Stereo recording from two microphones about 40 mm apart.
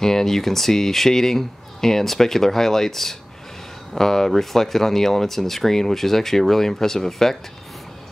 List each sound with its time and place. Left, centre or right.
0.0 s speech: centre